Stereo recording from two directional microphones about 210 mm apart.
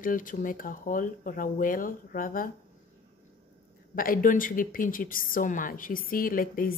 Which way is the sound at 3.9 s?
40° left (ahead or behind).